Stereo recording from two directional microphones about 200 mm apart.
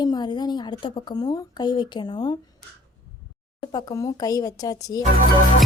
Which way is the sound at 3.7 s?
20° left (ahead or behind).